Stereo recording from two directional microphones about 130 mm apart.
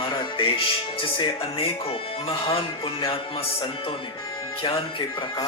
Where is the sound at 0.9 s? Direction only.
40° left (ahead or behind).